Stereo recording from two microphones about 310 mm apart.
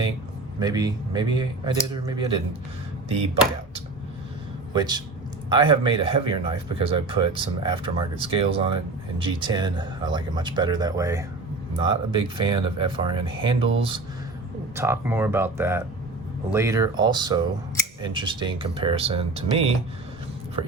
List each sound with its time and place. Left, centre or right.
0.6 s speech: centre
4.7 s speech: centre